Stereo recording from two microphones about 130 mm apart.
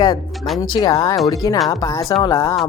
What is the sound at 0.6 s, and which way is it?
Speech, 30° left (ahead or behind).